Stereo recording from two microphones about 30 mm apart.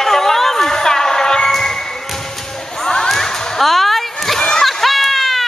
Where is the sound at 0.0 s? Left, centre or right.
Centre.